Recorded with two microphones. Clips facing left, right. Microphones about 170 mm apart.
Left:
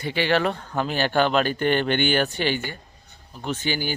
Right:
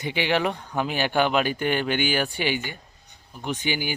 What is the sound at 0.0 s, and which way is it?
Speech, 15° right (ahead or behind).